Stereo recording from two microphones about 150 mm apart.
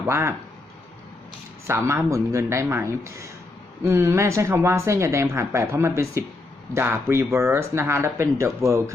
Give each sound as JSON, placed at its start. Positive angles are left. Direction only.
{"t": 0.0, "sound": "speech", "side_deg": -20}
{"t": 1.6, "sound": "speech", "side_deg": -20}